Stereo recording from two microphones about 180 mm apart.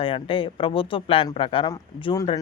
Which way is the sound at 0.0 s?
30° left (ahead or behind).